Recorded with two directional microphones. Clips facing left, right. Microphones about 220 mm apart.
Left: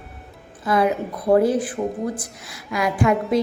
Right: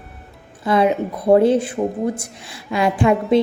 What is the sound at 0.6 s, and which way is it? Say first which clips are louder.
Speech: right 3 dB; 25° right (ahead or behind).